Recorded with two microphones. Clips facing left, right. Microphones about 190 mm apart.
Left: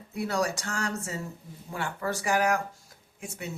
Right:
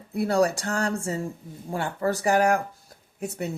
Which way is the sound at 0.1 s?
35° right (ahead or behind).